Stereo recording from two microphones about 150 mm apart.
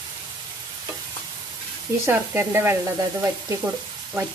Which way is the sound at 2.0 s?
15° right (ahead or behind).